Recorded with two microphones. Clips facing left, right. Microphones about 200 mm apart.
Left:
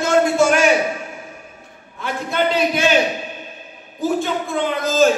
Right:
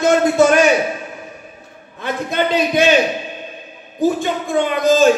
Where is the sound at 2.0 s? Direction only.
20° right (ahead or behind).